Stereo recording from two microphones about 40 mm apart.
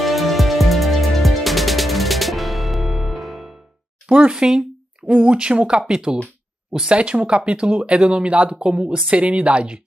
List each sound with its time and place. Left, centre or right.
0.0 s music: centre
4.1 s speech: right